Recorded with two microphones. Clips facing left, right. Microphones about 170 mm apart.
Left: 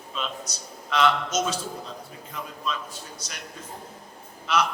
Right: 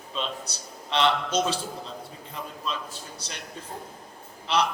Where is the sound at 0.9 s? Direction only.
30° right (ahead or behind).